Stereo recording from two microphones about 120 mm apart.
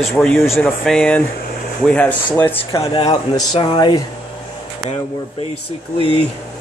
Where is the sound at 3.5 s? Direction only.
45° left (ahead or behind).